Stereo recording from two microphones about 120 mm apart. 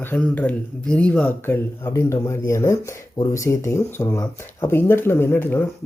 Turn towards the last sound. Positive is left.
turn(degrees=15)  # may be behind; listen again after turning